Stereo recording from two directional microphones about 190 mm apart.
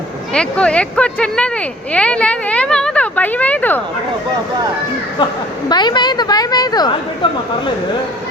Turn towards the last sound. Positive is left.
turn(degrees=25)  # may be behind; listen again after turning